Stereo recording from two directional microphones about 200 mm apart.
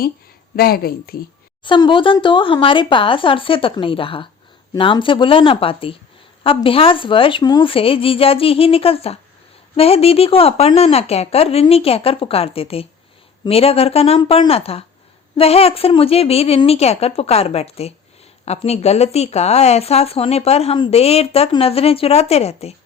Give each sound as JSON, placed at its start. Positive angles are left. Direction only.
{"t": 0.5, "sound": "speech", "side_deg": 50}
{"t": 1.6, "sound": "speech", "side_deg": 25}